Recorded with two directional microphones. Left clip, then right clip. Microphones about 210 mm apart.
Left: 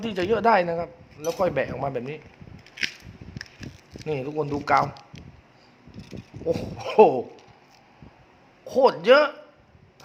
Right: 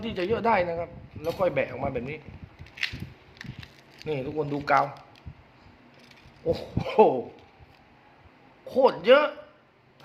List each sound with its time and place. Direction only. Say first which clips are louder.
0.0 s speech: left 4 dB; 15° left (ahead or behind)
4.0 s speech: left 2 dB; 15° left (ahead or behind)
6.5 s speech: left 1 dB; 15° left (ahead or behind)
8.6 s speech: left 2 dB; 15° left (ahead or behind)